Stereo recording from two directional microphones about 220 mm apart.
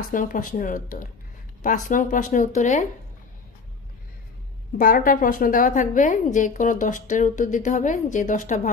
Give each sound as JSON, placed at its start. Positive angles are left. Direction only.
{"t": 0.1, "sound": "a woman's voice", "side_deg": 40}
{"t": 4.7, "sound": "a woman's voice", "side_deg": 40}